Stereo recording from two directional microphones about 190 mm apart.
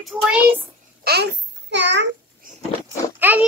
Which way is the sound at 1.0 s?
55° right (ahead or behind).